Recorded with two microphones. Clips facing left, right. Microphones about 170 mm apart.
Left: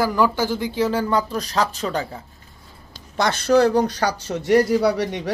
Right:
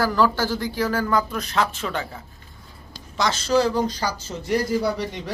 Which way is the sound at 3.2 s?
60° left (ahead or behind).